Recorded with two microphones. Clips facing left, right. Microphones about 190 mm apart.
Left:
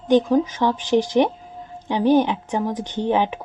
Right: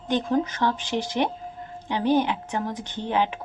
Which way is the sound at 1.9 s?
15° left (ahead or behind).